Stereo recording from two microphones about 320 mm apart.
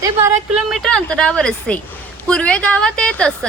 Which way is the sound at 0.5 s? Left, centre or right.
Centre.